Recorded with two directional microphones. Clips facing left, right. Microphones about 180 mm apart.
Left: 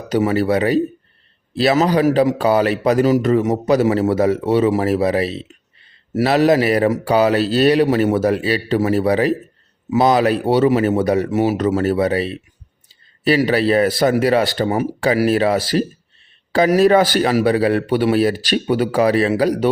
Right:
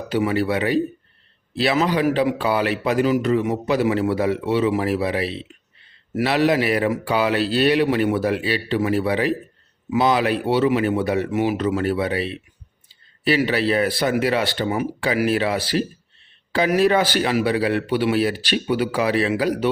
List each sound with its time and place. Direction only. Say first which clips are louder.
0.1 s speech: left 4 dB; 40° left (ahead or behind)